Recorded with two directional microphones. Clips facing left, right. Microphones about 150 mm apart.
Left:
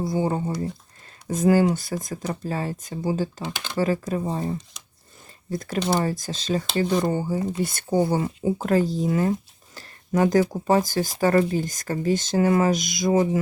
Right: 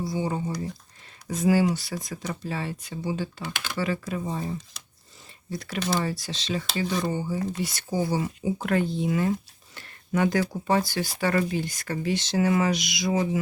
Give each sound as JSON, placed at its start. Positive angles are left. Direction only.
{"t": 0.0, "sound": "speech", "side_deg": 50}
{"t": 8.4, "sound": "speech", "side_deg": 40}
{"t": 9.7, "sound": "a sound", "side_deg": 40}
{"t": 10.8, "sound": "speech", "side_deg": 45}